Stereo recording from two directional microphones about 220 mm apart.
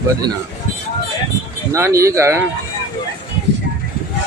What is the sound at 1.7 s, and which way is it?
Speech, 15° right (ahead or behind).